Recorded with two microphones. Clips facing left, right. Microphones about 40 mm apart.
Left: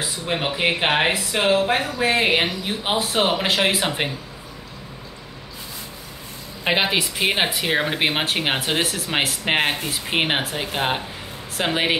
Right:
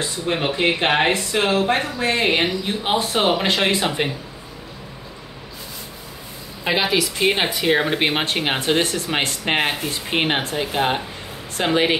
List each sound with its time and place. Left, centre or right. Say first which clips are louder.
0.3 s speech: right 2 dB; centre
6.6 s a woman's voice: right 1 dB; centre
7.2 s speech: right 2 dB; centre